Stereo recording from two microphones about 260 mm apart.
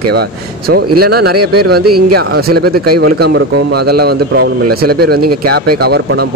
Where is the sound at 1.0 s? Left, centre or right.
Right.